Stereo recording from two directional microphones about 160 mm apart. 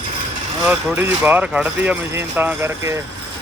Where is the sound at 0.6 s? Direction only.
10° right (ahead or behind).